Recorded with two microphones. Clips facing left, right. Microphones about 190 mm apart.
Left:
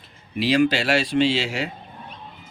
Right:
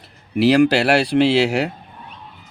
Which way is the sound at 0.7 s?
65° right (ahead or behind).